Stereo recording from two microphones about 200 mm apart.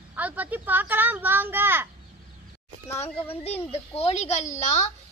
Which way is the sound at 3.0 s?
30° left (ahead or behind).